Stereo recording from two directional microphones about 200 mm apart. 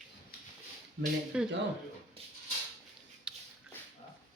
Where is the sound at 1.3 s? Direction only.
5° right (ahead or behind).